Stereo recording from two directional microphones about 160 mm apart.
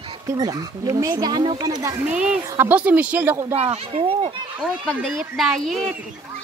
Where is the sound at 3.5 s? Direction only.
40° right (ahead or behind).